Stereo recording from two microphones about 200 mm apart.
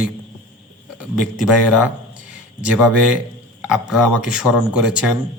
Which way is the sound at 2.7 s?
5° right (ahead or behind).